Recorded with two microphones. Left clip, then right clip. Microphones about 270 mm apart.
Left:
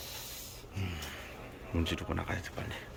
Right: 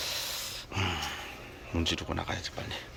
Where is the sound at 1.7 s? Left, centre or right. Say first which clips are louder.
Right 4 dB; centre.